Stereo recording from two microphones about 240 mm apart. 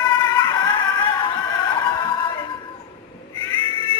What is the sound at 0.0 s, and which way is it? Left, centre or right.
Music, centre.